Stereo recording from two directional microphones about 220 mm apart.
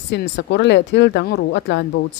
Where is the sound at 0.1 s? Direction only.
50° left (ahead or behind).